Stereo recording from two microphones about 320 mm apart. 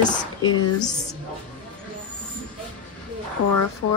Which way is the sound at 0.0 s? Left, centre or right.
Left.